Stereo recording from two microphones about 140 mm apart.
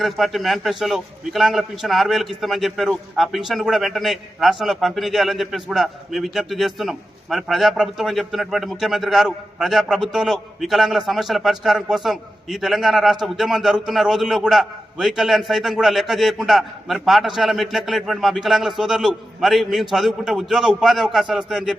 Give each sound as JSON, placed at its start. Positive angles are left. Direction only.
{"t": 0.0, "sound": "a man's voice", "side_deg": 0}